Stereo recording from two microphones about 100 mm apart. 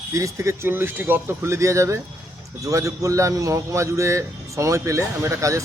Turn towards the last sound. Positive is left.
turn(degrees=-30)  # may be behind; listen again after turning